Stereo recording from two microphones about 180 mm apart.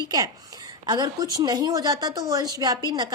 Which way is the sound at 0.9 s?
20° right (ahead or behind).